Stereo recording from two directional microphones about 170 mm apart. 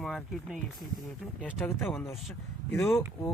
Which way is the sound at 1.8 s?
10° left (ahead or behind).